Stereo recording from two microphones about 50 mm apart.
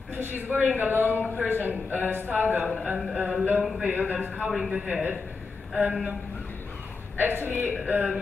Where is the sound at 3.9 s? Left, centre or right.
Right.